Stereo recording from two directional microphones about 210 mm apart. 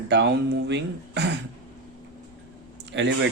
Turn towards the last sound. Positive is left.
turn(degrees=-60)  # may be behind; listen again after turning